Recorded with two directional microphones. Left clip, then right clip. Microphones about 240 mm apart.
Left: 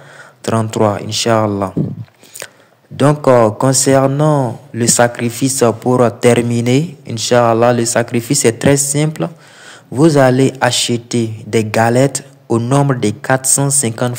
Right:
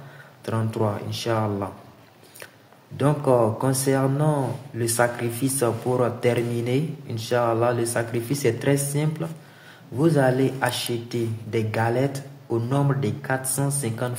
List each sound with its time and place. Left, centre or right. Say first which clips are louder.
0.5 s a man's voice: left 12 dB; left
3.0 s a man's voice: left 10 dB; left